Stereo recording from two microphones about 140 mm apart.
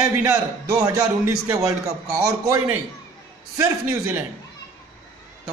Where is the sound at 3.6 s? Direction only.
15° right (ahead or behind).